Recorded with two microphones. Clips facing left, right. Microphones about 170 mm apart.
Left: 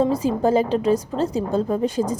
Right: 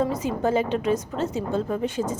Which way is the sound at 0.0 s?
30° left (ahead or behind).